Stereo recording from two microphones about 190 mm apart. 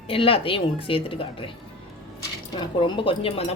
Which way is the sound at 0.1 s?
30° left (ahead or behind).